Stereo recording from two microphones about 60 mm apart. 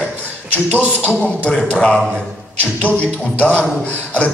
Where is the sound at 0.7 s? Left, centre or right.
Right.